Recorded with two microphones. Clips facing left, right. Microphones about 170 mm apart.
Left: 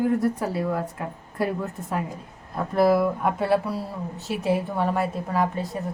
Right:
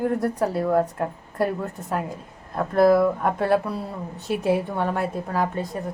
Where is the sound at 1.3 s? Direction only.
Centre (ahead or behind).